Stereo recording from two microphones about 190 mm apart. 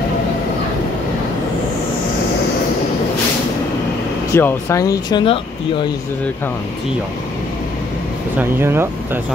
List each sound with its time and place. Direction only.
4.3 s speech: 15° left (ahead or behind)
8.4 s speech: 10° right (ahead or behind)